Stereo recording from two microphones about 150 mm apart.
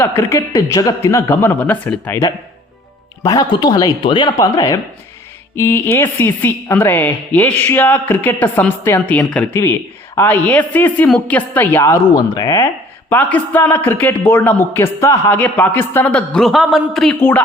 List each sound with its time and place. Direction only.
0.0 s a woman's voice: 15° left (ahead or behind)
13.1 s a woman's voice: 10° left (ahead or behind)
17.2 s a woman's voice: 15° left (ahead or behind)